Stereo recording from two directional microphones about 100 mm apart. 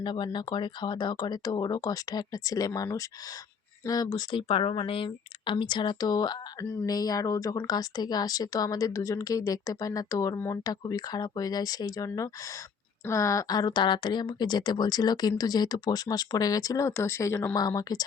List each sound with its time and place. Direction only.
0.0 s speech: 50° left (ahead or behind); by 17.5 s 25° left (ahead or behind)
17.5 s speech: 40° left (ahead or behind)